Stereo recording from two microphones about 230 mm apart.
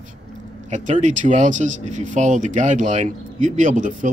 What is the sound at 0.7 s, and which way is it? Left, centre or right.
Speech, right.